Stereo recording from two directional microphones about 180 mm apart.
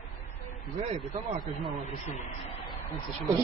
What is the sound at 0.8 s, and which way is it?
Speech, 35° right (ahead or behind).